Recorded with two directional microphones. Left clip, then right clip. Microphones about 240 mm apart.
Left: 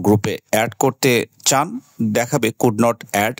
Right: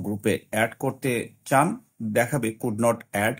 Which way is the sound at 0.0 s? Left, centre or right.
Left.